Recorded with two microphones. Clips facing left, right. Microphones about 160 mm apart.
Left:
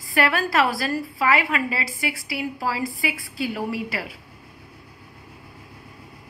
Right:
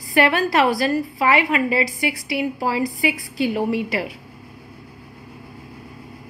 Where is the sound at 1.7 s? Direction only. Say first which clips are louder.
Right 7 dB; 35° left (ahead or behind).